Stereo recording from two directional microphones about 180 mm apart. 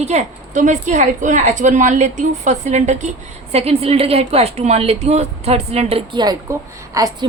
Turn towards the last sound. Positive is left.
turn(degrees=-20)  # may be behind; listen again after turning